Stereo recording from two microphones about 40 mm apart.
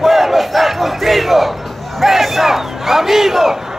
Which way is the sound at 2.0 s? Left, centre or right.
Centre.